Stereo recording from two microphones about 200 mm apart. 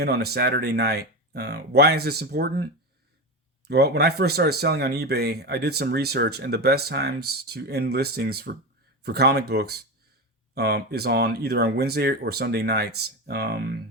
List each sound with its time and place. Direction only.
0.0 s speech: 55° right (ahead or behind)
3.7 s speech: 55° right (ahead or behind)